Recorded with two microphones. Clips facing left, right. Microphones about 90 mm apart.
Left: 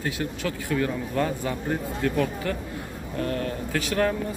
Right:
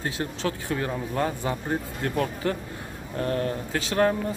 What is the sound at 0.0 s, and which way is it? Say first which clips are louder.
Speech: even; 35° right (ahead or behind).